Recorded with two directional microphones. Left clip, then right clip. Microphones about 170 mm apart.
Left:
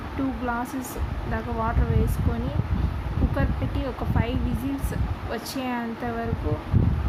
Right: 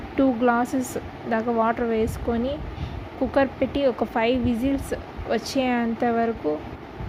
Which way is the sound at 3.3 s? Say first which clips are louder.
Right 11 dB; 40° right (ahead or behind).